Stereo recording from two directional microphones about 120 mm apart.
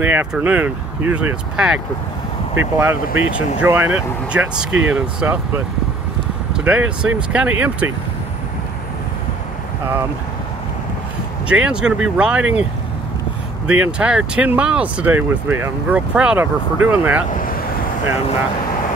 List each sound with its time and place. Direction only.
0.0 s speech: 15° right (ahead or behind)
2.8 s speech: 15° right (ahead or behind)
11.4 s speech: 10° right (ahead or behind)
13.7 s speech: 10° right (ahead or behind)